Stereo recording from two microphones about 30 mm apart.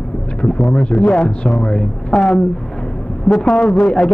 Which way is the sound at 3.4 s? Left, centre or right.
Left.